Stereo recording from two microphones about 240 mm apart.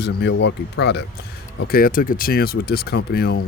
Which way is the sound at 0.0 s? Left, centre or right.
Left.